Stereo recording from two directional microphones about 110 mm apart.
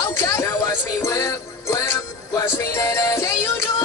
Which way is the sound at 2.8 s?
30° left (ahead or behind).